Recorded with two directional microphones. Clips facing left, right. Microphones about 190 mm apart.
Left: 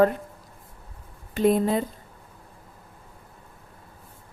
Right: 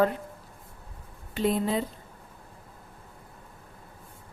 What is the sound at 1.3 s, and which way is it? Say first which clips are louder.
Speech: left 5 dB; 50° left (ahead or behind).